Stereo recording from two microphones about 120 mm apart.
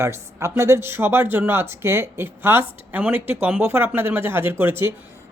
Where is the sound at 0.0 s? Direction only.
25° right (ahead or behind).